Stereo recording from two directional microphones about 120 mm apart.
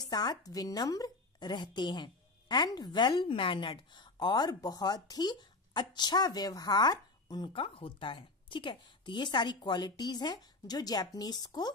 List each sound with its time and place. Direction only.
0.0 s a woman's voice: 35° left (ahead or behind)